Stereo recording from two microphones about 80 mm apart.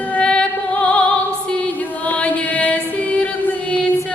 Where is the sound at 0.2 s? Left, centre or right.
Centre.